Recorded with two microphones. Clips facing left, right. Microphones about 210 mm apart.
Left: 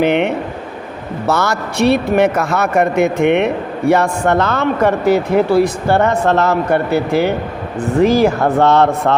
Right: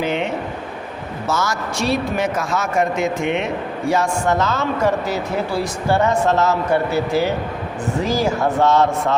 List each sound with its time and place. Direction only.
0.0 s speech: 65° left (ahead or behind)